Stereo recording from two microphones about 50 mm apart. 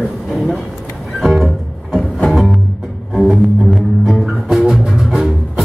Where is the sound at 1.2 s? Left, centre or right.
Centre.